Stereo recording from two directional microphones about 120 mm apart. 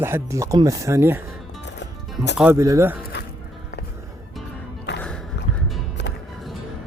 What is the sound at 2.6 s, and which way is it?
Speech, 25° right (ahead or behind).